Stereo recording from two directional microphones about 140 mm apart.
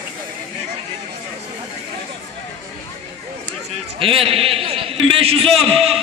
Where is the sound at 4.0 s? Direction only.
40° right (ahead or behind).